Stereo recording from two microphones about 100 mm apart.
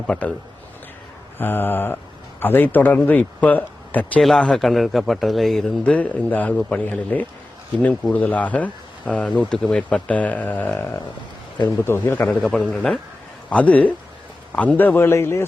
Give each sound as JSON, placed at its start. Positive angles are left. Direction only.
{"t": 0.1, "sound": "speech", "side_deg": 10}
{"t": 1.4, "sound": "a man's voice", "side_deg": 20}
{"t": 12.4, "sound": "a man's voice", "side_deg": 5}